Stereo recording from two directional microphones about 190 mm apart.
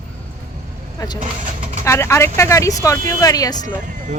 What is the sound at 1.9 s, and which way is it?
Speech, 15° left (ahead or behind).